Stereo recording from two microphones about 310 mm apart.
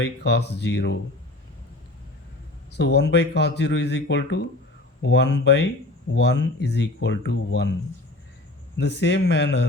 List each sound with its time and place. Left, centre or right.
0.0 s speech: left
2.7 s speech: left
8.8 s speech: left